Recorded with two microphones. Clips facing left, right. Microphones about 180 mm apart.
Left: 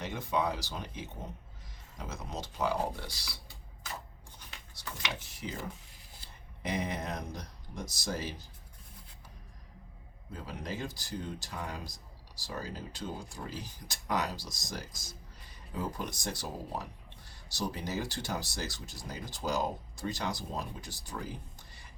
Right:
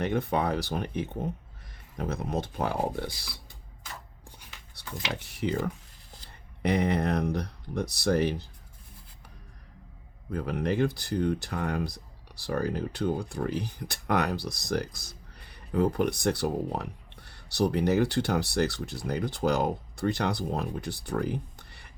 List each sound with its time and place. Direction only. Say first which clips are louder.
0.0 s speech: right 6 dB; 60° right (ahead or behind)
5.2 s speech: right 11 dB; 65° right (ahead or behind)
6.6 s speech: right 9 dB; 65° right (ahead or behind)
10.3 s speech: right 12 dB; 60° right (ahead or behind)